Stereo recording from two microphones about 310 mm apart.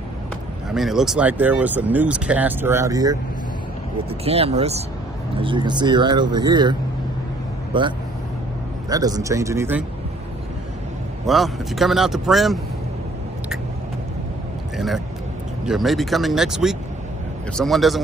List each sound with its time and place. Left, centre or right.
0.7 s speech: centre
11.2 s speech: centre
15.6 s speech: centre